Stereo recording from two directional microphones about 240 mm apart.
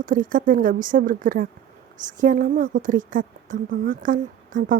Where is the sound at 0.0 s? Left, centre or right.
Right.